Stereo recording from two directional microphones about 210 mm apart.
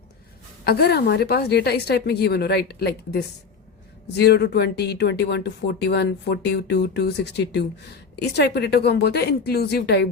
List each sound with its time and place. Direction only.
0.6 s speech: 50° left (ahead or behind)